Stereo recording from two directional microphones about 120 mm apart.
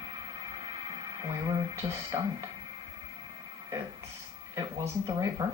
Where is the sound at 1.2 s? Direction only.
30° right (ahead or behind).